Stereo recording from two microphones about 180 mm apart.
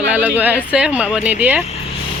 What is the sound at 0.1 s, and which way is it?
Speech, 10° right (ahead or behind).